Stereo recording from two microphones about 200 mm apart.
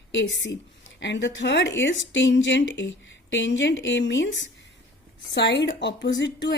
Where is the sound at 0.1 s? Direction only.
60° left (ahead or behind).